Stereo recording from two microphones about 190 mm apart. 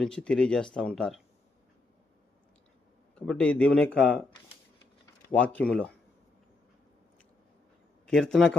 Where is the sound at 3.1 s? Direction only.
5° left (ahead or behind).